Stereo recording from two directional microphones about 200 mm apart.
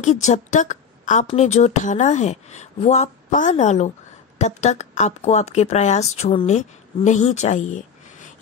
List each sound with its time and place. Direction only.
0.0 s speech: 35° left (ahead or behind)